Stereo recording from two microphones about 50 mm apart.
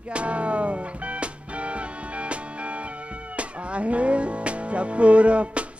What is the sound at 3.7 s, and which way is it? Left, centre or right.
Music, right.